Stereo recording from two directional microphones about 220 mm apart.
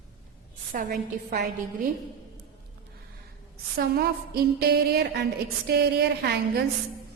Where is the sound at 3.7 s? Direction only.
45° right (ahead or behind).